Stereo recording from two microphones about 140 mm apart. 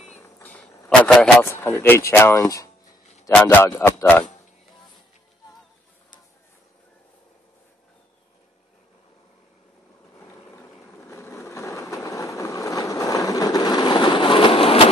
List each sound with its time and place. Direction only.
0.4 s a sound: 10° left (ahead or behind)
1.4 s a man's voice: 15° left (ahead or behind)
10.2 s vehicle: 20° left (ahead or behind); by 14.9 s 40° left (ahead or behind)